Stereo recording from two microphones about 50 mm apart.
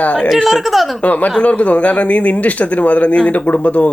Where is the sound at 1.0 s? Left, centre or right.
Left.